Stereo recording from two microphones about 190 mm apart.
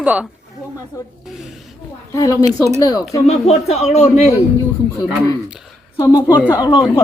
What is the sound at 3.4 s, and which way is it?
Speech, 35° left (ahead or behind).